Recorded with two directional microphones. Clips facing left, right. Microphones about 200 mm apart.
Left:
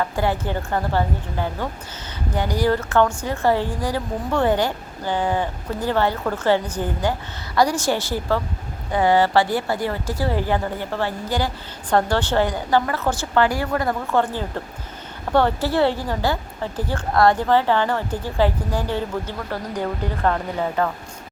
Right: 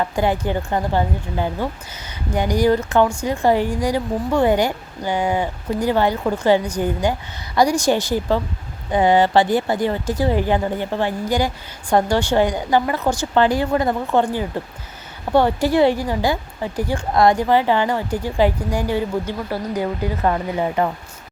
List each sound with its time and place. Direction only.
0.0 s speech: 15° right (ahead or behind)